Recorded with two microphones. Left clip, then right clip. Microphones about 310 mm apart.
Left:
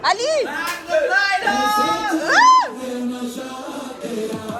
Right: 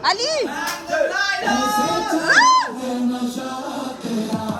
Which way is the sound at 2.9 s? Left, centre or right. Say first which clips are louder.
Right 3 dB; right.